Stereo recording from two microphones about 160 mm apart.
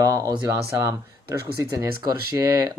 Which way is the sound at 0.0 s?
20° right (ahead or behind).